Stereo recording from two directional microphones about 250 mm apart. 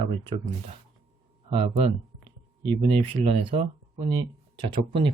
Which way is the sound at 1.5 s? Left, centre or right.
Right.